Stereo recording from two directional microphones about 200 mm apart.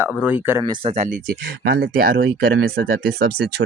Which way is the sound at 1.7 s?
50° right (ahead or behind).